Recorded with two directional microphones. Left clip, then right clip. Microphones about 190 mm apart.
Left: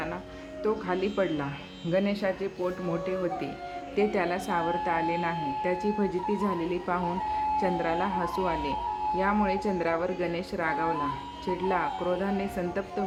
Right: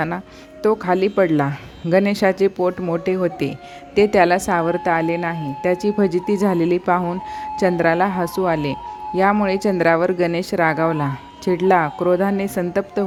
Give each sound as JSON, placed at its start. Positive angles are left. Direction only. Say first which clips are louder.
{"t": 0.6, "sound": "speech", "louder": "right 11 dB", "side_deg": -55}